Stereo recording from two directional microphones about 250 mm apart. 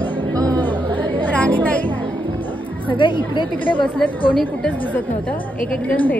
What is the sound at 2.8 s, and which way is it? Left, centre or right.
Speech, centre.